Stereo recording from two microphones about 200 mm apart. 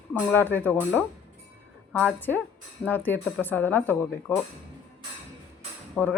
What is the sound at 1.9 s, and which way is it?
A woman's voice, 5° left (ahead or behind).